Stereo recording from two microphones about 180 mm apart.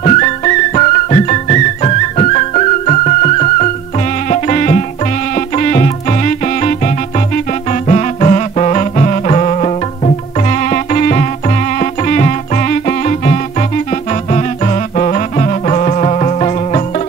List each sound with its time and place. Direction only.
0.0 s music: 40° left (ahead or behind)
7.9 s music: 35° left (ahead or behind)